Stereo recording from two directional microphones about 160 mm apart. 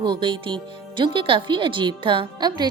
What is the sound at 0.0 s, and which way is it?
A woman's voice, 30° right (ahead or behind).